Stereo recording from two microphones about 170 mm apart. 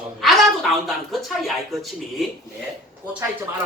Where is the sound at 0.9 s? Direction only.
Centre (ahead or behind).